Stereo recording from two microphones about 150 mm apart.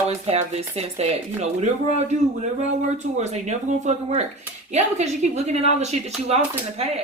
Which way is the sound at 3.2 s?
50° right (ahead or behind).